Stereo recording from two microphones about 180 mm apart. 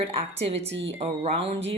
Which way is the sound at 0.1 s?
35° right (ahead or behind).